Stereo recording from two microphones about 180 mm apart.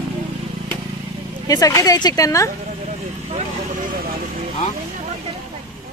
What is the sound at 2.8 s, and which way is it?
Vehicle, 45° right (ahead or behind).